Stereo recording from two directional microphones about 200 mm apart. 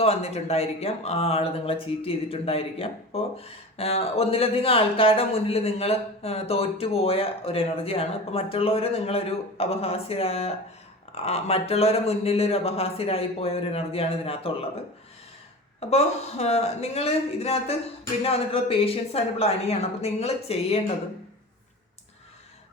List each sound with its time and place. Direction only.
0.0 s speech: 30° left (ahead or behind)
15.8 s speech: 30° left (ahead or behind)